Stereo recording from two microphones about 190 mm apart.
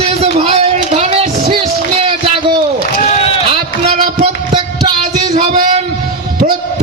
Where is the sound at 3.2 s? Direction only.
30° left (ahead or behind).